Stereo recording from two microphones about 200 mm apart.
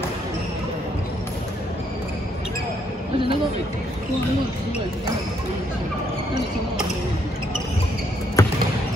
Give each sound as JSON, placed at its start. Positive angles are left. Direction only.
{"t": 8.4, "sound": "basketball bounce", "side_deg": 15}